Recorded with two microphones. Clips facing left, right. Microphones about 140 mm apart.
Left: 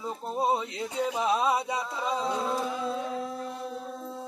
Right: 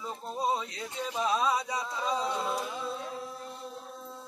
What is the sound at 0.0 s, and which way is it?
Speech, 25° left (ahead or behind).